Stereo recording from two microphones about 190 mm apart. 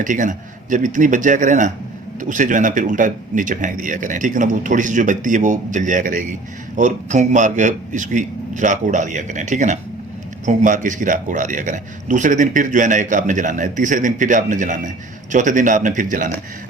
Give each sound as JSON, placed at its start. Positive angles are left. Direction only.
{"t": 0.0, "sound": "a man's voice", "side_deg": -45}